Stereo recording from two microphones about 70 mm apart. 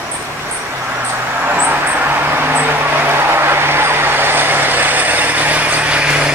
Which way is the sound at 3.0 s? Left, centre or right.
Right.